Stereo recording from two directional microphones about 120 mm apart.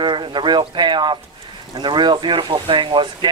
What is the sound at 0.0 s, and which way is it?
Speech, 40° right (ahead or behind).